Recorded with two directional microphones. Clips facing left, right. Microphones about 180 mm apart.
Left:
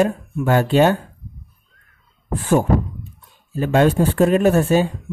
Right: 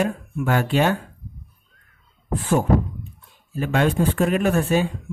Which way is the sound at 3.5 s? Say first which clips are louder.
Left 5 dB; 35° left (ahead or behind).